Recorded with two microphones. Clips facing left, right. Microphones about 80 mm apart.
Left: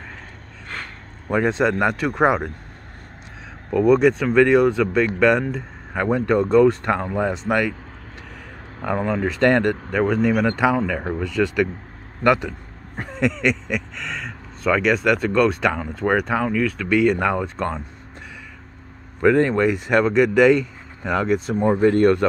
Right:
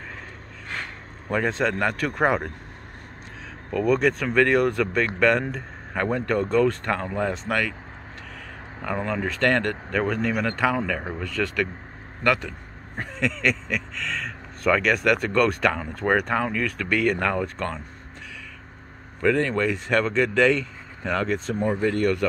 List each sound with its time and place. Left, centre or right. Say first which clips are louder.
1.3 s speech: left 4 dB; centre
3.9 s speech: left 5 dB; centre
8.8 s speech: left 5 dB; centre
19.2 s speech: left 5 dB; left
21.6 s speech: left 7 dB; left